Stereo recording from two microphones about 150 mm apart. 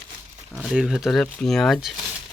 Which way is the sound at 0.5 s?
5° right (ahead or behind).